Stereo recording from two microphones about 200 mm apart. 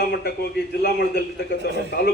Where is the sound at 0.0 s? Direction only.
55° left (ahead or behind).